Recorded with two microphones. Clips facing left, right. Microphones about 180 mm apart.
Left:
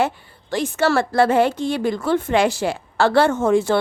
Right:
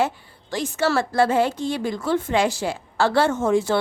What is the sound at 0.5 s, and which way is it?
Speech, 60° left (ahead or behind).